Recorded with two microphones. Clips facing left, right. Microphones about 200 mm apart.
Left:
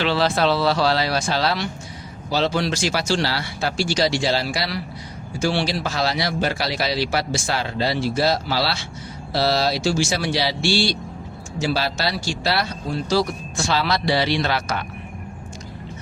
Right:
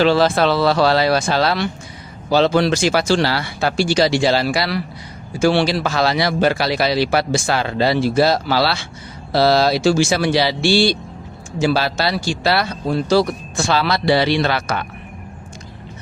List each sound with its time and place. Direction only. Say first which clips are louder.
0.0 s speech: right 5 dB; 45° right (ahead or behind)